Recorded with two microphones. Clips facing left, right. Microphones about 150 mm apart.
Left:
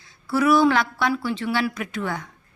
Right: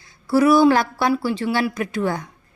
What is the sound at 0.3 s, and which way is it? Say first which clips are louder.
A woman's voice: right 4 dB; 35° right (ahead or behind).